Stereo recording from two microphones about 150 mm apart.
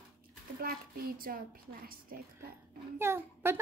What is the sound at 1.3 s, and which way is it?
Speech, 75° right (ahead or behind).